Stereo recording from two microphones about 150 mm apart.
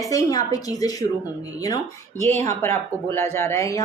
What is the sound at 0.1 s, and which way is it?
A woman's voice, 25° left (ahead or behind).